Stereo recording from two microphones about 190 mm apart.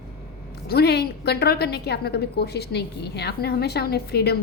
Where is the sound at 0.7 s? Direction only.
60° left (ahead or behind).